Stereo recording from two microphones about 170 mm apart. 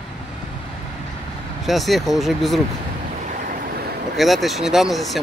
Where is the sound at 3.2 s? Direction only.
50° right (ahead or behind).